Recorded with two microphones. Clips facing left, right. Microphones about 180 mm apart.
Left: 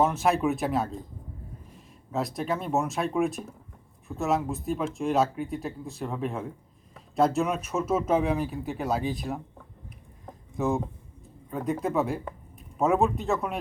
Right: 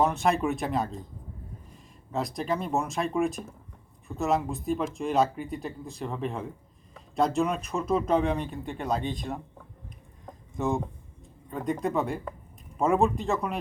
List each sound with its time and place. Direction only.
0.0 s speech: centre (ahead or behind)
2.1 s speech: centre (ahead or behind)
10.2 s a sound: centre (ahead or behind)
11.5 s speech: 5° left (ahead or behind)